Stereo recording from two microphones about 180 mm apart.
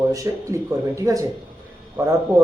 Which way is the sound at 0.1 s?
20° right (ahead or behind).